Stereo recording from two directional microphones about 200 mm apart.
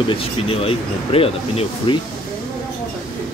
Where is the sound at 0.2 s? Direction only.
30° left (ahead or behind).